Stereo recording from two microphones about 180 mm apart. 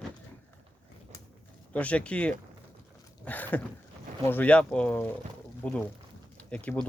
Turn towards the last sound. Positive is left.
turn(degrees=5)  # may be behind; listen again after turning